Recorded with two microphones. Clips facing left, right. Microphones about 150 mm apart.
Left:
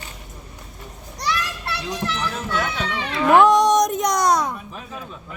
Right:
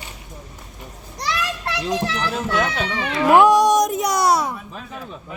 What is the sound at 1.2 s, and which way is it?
Children playing, 90° right.